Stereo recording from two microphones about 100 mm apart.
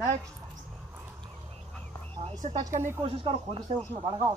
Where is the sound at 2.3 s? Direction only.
40° right (ahead or behind).